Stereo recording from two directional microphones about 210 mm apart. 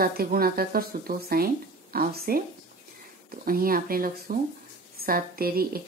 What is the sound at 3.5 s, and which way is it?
Speech, 45° right (ahead or behind).